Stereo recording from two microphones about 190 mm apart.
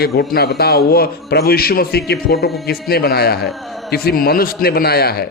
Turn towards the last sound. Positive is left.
turn(degrees=55)  # may be behind; listen again after turning